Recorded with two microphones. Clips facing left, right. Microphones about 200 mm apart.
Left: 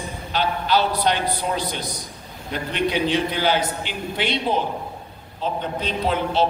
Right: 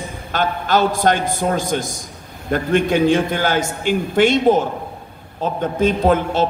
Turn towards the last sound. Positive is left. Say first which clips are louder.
# right 6 dB
turn(degrees=-50)  # may be behind; listen again after turning